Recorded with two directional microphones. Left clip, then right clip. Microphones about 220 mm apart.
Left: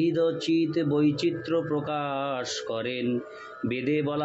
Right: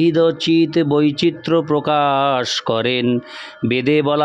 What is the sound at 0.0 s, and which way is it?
Speech, 50° right (ahead or behind).